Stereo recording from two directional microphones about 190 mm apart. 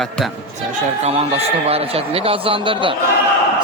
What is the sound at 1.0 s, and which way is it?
A man's voice, 30° right (ahead or behind).